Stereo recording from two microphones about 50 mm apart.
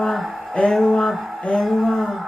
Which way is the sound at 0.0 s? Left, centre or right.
Centre.